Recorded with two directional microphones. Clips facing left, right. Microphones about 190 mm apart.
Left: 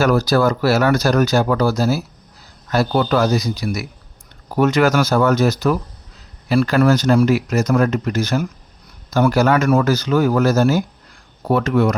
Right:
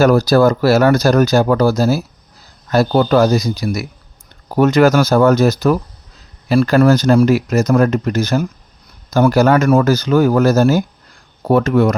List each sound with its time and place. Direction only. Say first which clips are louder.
0.0 s speech: right 5 dB; 40° right (ahead or behind)